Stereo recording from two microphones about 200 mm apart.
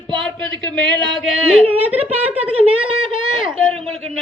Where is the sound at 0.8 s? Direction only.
5° left (ahead or behind).